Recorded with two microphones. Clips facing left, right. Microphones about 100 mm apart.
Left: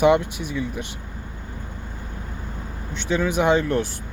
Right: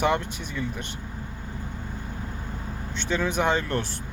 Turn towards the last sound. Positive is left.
turn(degrees=15)  # may be behind; listen again after turning